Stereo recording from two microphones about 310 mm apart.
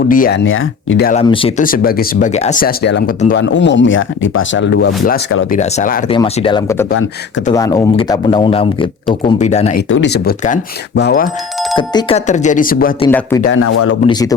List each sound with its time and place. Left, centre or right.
0.1 s speech: left
1.2 s speech: centre
9.9 s speech: left
11.8 s speech: centre
13.0 s speech: centre
13.7 s speech: left
14.1 s speech: centre